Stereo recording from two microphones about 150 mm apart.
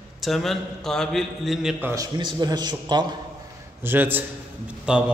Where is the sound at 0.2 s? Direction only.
Centre (ahead or behind).